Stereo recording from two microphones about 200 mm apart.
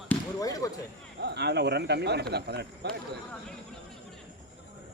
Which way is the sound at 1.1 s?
55° right (ahead or behind).